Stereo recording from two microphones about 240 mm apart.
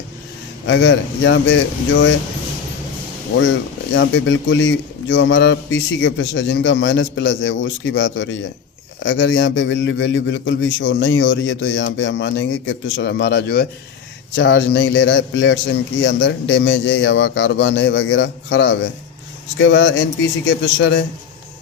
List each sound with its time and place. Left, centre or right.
0.7 s a man's voice: left
3.9 s a man's voice: left